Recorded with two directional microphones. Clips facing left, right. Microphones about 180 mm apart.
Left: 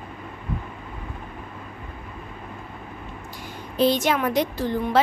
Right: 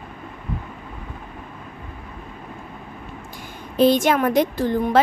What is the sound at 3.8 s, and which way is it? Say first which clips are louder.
A woman's voice: right 4 dB; 50° right (ahead or behind).